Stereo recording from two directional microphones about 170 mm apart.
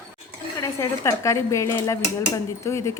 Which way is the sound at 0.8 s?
15° left (ahead or behind).